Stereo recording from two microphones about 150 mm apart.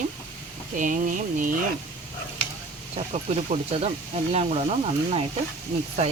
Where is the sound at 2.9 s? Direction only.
45° right (ahead or behind).